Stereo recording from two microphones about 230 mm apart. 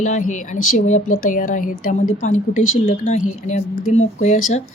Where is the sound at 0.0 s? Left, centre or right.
Left.